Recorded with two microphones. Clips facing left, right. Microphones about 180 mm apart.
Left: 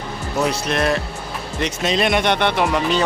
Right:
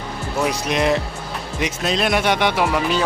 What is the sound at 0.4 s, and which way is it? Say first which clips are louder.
Speech: right 1 dB; 15° right (ahead or behind).